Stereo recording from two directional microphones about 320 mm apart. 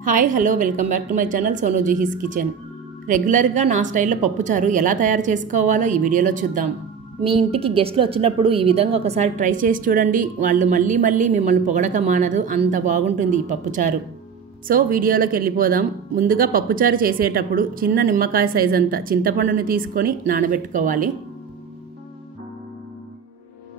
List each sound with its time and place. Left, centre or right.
0.0 s a woman's voice: right